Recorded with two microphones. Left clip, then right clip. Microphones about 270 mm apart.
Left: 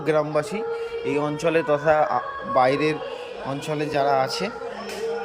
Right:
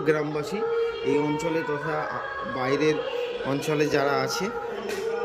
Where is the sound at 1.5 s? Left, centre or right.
Left.